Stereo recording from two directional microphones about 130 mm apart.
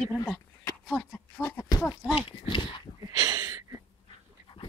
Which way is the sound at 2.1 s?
40° left (ahead or behind).